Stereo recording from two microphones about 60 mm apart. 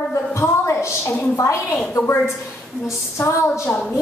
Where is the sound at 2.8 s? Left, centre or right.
Left.